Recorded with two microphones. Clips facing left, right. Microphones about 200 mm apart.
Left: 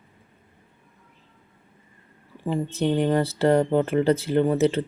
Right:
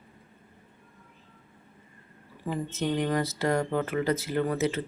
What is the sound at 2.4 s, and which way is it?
Speech, 30° left (ahead or behind).